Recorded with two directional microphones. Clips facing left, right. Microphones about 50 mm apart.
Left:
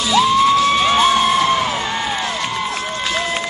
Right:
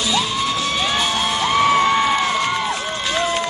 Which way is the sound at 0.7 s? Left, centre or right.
Left.